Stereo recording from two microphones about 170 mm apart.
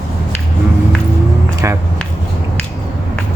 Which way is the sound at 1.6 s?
15° right (ahead or behind).